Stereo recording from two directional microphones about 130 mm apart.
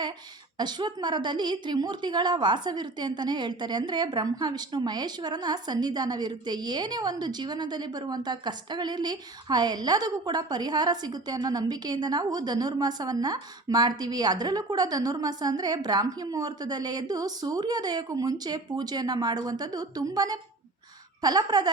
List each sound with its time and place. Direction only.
0.6 s a woman's voice: 35° right (ahead or behind)